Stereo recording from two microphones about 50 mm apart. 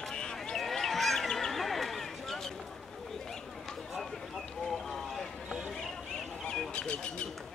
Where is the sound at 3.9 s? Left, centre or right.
Centre.